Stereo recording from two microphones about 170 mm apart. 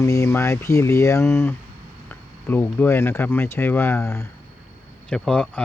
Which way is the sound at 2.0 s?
10° left (ahead or behind).